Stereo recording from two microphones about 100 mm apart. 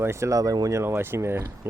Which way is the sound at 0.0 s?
30° right (ahead or behind).